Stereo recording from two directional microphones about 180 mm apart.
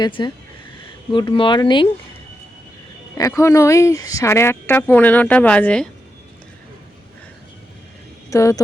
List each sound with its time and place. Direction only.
0.0 s speech: 25° left (ahead or behind)
3.2 s speech: 15° left (ahead or behind)
8.3 s speech: 15° left (ahead or behind)